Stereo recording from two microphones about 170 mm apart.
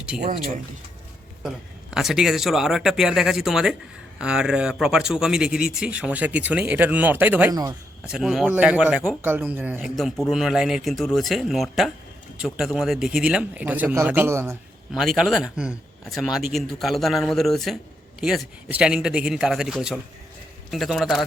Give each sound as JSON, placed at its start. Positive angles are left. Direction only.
{"t": 0.1, "sound": "speech", "side_deg": -5}
{"t": 1.5, "sound": "speech", "side_deg": 0}
{"t": 7.5, "sound": "speech", "side_deg": -20}
{"t": 8.0, "sound": "speech", "side_deg": -5}
{"t": 9.9, "sound": "speech", "side_deg": 0}
{"t": 14.9, "sound": "speech", "side_deg": 0}